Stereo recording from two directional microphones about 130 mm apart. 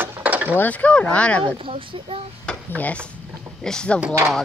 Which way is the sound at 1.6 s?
45° right (ahead or behind).